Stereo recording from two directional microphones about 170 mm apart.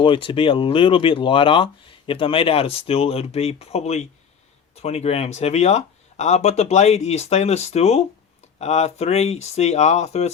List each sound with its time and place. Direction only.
0.0 s speech: 30° left (ahead or behind)